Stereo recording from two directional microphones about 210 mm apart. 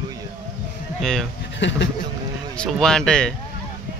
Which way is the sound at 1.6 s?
60° left (ahead or behind).